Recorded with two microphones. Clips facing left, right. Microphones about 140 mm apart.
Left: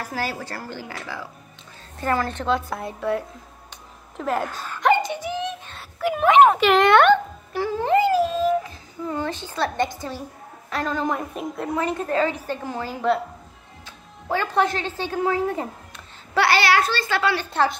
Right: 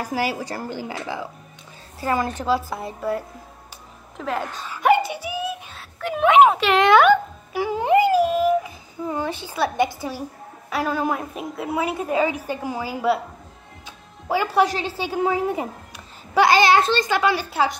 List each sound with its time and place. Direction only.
0.0 s a woman's voice: 15° right (ahead or behind)
4.2 s a sound: 5° left (ahead or behind)
9.9 s a woman's voice: 10° right (ahead or behind)
17.5 s a woman's voice: 5° right (ahead or behind)